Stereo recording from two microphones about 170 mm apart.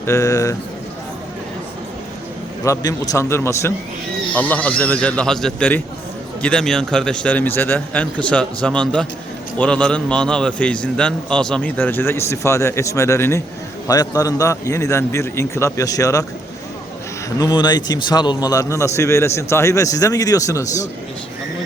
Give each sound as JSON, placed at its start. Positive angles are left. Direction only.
{"t": 0.0, "sound": "a man's voice", "side_deg": 15}
{"t": 2.6, "sound": "a man's voice", "side_deg": 20}
{"t": 17.2, "sound": "a man's voice", "side_deg": 25}